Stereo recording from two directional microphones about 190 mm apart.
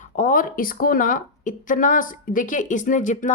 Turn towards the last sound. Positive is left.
turn(degrees=40)  # may be behind; listen again after turning